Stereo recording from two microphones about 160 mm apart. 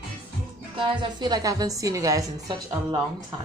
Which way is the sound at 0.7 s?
30° right (ahead or behind).